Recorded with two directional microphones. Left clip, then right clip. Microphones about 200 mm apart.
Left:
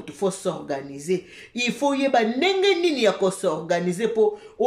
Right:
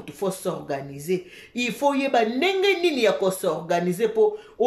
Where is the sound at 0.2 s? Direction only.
Centre (ahead or behind).